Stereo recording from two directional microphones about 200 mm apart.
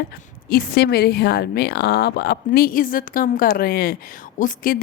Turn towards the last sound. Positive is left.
turn(degrees=45)  # may be behind; listen again after turning